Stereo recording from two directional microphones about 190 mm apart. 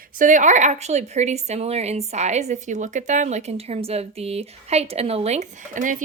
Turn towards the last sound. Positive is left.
turn(degrees=-45)  # may be behind; listen again after turning